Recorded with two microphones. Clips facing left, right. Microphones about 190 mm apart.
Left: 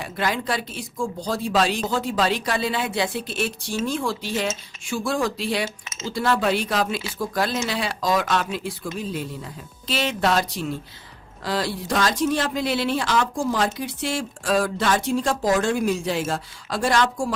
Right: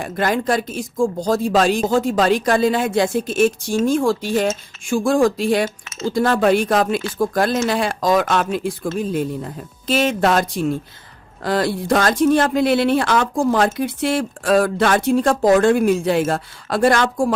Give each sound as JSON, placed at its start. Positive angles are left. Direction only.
{"t": 0.0, "sound": "speech", "side_deg": -50}